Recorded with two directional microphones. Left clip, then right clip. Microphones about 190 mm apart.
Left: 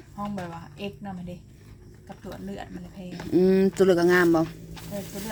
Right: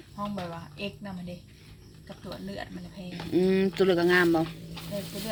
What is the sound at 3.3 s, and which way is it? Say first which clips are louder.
Speech: left 4 dB; 30° left (ahead or behind).